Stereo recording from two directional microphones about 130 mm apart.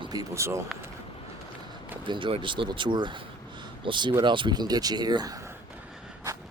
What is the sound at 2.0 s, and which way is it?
Speech, 40° right (ahead or behind).